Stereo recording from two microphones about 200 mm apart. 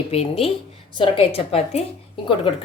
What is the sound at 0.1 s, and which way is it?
A woman's voice, 30° left (ahead or behind).